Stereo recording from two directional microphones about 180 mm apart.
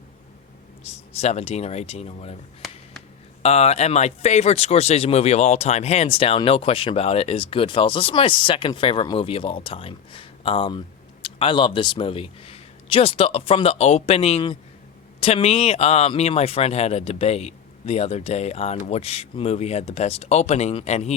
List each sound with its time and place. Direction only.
1.1 s speech: 35° left (ahead or behind)
3.4 s speech: 35° left (ahead or behind)